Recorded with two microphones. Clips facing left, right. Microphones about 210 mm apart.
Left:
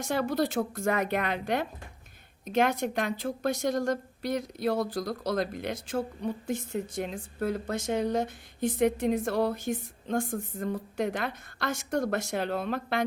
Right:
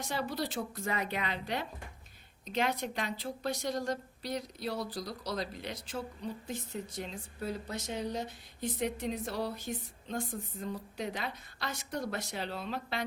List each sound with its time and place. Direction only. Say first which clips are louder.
0.0 s a woman's voice: left 8 dB; 50° left (ahead or behind)